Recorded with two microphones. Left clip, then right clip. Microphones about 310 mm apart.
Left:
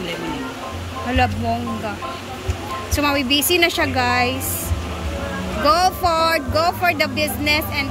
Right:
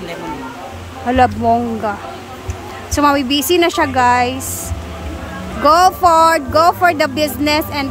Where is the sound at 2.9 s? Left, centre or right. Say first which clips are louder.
Right 5 dB; centre.